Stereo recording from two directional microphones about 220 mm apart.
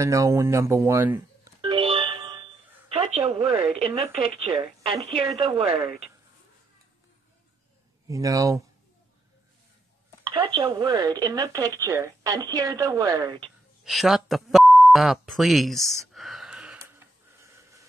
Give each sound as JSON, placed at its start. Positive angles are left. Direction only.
{"t": 0.0, "sound": "speech", "side_deg": -15}
{"t": 1.6, "sound": "a sound", "side_deg": -25}
{"t": 5.0, "sound": "a woman's voice", "side_deg": -25}
{"t": 8.1, "sound": "speech", "side_deg": -15}
{"t": 10.2, "sound": "speech", "side_deg": -20}
{"t": 13.8, "sound": "speech", "side_deg": 0}
{"t": 15.8, "sound": "speech", "side_deg": -15}
{"t": 16.1, "sound": "a sound", "side_deg": 0}